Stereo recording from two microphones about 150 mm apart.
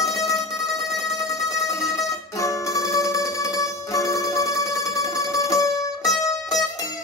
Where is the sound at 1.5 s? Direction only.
20° left (ahead or behind).